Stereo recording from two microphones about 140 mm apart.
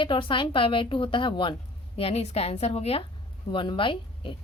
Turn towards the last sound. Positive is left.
turn(degrees=35)  # may be behind; listen again after turning